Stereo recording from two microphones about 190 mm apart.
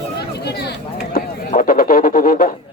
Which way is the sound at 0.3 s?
60° left (ahead or behind).